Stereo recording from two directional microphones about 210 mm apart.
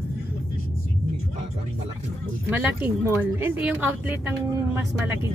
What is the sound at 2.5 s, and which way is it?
A woman's voice, 10° right (ahead or behind).